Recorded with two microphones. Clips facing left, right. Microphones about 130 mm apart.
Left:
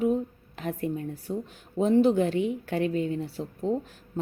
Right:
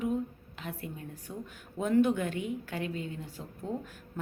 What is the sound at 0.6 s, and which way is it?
Speech, 40° left (ahead or behind).